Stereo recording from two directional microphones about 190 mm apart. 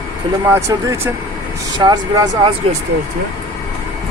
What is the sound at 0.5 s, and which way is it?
Speech, 15° right (ahead or behind).